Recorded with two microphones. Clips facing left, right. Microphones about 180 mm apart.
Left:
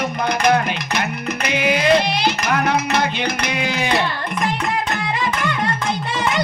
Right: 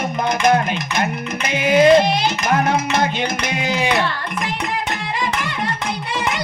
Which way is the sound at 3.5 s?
45° right (ahead or behind).